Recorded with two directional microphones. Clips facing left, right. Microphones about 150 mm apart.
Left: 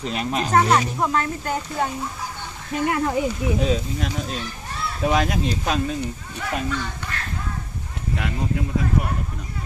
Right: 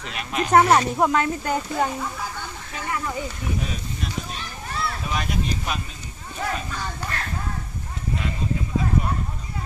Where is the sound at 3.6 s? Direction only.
90° left.